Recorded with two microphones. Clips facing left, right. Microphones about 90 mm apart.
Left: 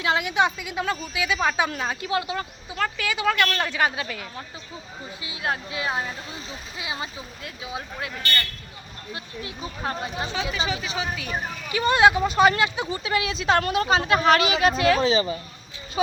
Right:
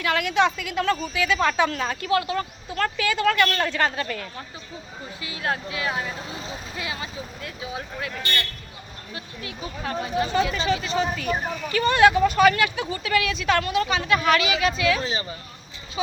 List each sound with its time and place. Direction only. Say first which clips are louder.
0.0 s a woman's voice: right 1 dB; 20° left (ahead or behind)
2.6 s a woman's voice: right 2 dB; 5° left (ahead or behind)
5.2 s speech: right 1 dB; 20° left (ahead or behind)
9.1 s speech: even; 25° left (ahead or behind)
10.5 s a woman's voice: right 4 dB; 5° left (ahead or behind)
11.7 s speech: even; 20° left (ahead or behind); by 15.0 s 40° left (ahead or behind)